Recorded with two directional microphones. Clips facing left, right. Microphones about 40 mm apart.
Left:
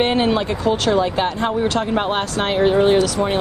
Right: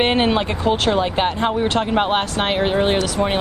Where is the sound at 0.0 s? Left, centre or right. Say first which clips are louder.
Even; right.